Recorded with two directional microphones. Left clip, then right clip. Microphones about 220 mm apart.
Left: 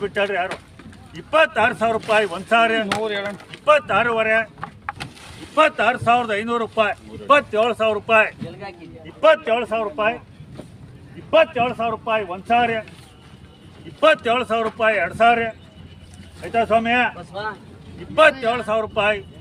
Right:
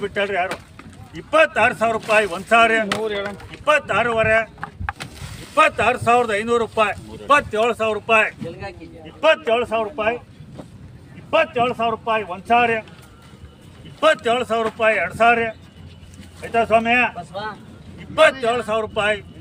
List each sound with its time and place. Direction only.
0.0 s a man's voice: 5° right (ahead or behind)
3.0 s speech: 55° left (ahead or behind)
3.6 s a man's voice: 10° right (ahead or behind)
5.5 s a man's voice: 20° right (ahead or behind)
11.3 s a man's voice: 5° right (ahead or behind)
14.0 s a man's voice: 10° right (ahead or behind)
18.1 s a man's voice: 15° right (ahead or behind)